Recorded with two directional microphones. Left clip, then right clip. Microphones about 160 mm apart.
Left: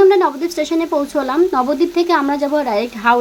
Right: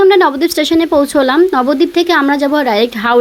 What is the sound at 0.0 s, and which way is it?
Speech, 25° right (ahead or behind).